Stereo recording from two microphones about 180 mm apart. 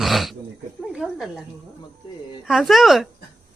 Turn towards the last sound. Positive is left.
turn(degrees=0)  # may be behind; listen again after turning